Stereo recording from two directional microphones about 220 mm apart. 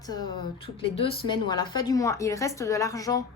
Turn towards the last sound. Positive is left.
turn(degrees=15)  # may be behind; listen again after turning